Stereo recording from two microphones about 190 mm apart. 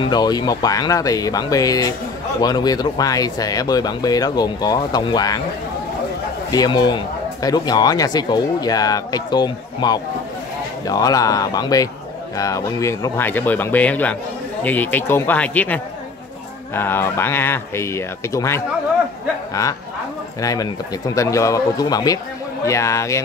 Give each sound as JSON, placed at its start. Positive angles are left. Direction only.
{"t": 0.0, "sound": "speech", "side_deg": 20}
{"t": 6.5, "sound": "speech", "side_deg": 20}
{"t": 20.3, "sound": "speech", "side_deg": 20}